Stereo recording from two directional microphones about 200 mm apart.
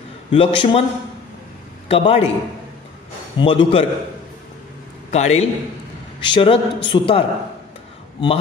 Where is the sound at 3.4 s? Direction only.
25° left (ahead or behind).